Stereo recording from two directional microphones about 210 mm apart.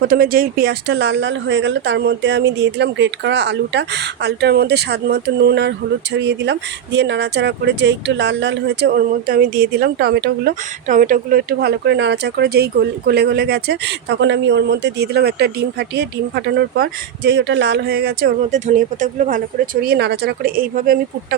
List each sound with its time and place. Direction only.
0.1 s speech: 45° right (ahead or behind)